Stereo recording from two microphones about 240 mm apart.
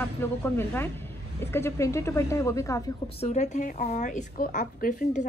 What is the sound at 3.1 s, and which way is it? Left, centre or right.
A woman's voice, left.